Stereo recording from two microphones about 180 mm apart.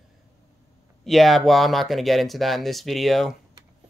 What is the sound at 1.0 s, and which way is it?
Speech, centre (ahead or behind).